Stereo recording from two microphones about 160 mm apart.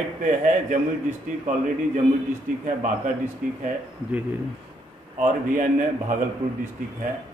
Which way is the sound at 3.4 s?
60° right (ahead or behind).